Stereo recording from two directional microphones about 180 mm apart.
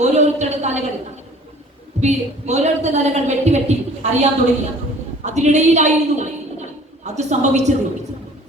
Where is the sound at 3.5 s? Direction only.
40° right (ahead or behind).